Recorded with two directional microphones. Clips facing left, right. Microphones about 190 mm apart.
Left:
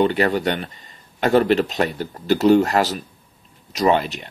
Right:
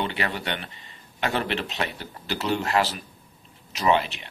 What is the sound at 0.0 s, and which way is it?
Speech, 40° left (ahead or behind).